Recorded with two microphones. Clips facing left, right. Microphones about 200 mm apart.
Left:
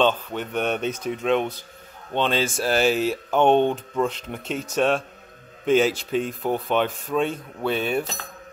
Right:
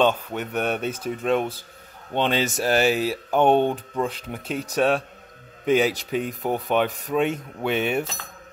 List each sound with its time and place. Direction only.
0.0 s speech: 10° right (ahead or behind)
2.1 s speech: 15° right (ahead or behind)
7.6 s cutlery: 20° right (ahead or behind)